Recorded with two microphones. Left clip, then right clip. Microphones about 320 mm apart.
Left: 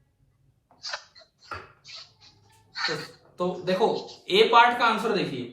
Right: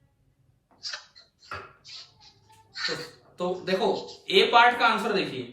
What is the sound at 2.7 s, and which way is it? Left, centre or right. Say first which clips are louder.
A man's voice: left 2 dB; centre.